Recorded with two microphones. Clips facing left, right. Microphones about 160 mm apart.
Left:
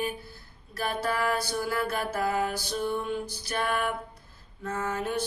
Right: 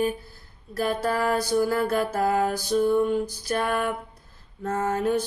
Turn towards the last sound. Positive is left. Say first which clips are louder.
# right 6 dB
turn(degrees=-45)  # may be behind; listen again after turning